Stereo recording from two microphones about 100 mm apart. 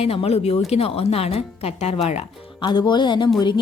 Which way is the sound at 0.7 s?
80° left.